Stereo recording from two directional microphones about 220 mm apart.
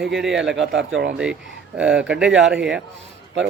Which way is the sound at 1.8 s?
5° right (ahead or behind).